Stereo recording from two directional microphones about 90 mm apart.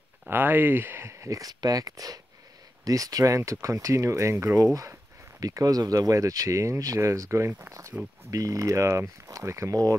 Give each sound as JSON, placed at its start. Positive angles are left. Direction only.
{"t": 0.3, "sound": "speech", "side_deg": -25}
{"t": 8.3, "sound": "speech", "side_deg": -40}